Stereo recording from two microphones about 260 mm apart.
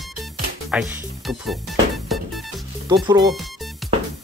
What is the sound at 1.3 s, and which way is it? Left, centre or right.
Music, centre.